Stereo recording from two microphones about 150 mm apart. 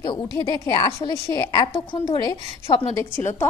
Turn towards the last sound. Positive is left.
turn(degrees=15)  # may be behind; listen again after turning